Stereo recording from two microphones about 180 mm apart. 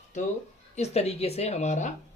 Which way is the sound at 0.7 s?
35° left (ahead or behind).